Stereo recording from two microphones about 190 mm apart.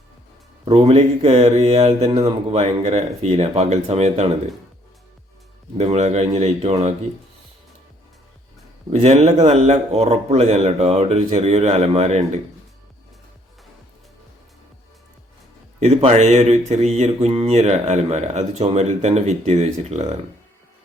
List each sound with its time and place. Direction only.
0.6 s speech: 35° right (ahead or behind)
5.7 s speech: 35° right (ahead or behind)
8.9 s speech: 35° right (ahead or behind)
15.8 s speech: 35° right (ahead or behind)